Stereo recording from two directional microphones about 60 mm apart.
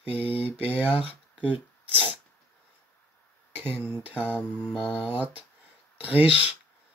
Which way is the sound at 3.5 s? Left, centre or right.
Right.